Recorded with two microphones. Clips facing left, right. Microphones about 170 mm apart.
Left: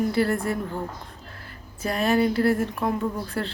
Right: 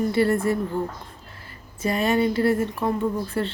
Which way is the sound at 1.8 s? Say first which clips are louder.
Right 1 dB; centre (ahead or behind).